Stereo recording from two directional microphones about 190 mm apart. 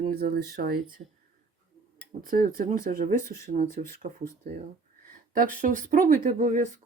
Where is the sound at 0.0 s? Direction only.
50° right (ahead or behind).